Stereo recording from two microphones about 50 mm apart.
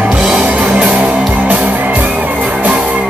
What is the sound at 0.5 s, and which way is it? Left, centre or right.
Music, right.